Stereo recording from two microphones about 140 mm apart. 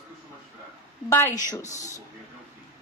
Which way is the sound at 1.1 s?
15° left (ahead or behind).